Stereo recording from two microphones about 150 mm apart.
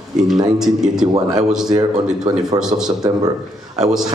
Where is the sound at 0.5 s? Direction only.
5° right (ahead or behind).